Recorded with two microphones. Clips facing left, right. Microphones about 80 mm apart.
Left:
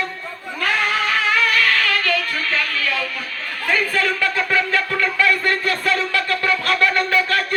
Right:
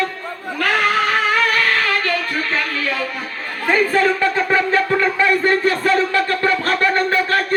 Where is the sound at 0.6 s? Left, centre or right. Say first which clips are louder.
Right 3 dB; right.